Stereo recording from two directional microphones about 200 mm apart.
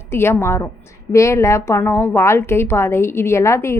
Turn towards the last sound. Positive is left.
turn(degrees=15)  # may be behind; listen again after turning